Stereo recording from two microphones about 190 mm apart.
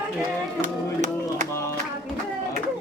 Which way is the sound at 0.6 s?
40° right (ahead or behind).